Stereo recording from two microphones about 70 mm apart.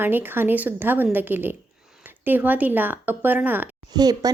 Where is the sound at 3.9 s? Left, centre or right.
Right.